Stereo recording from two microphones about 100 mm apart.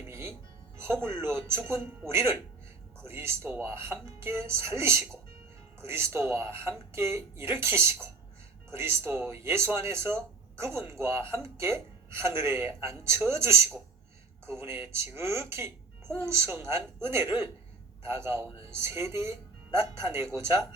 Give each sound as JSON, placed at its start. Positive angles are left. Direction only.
{"t": 0.1, "sound": "music", "side_deg": -25}
{"t": 0.8, "sound": "a woman's voice", "side_deg": -25}